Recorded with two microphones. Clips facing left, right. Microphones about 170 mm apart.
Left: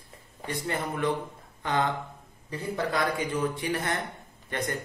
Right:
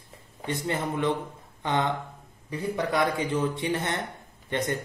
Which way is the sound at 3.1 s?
25° right (ahead or behind).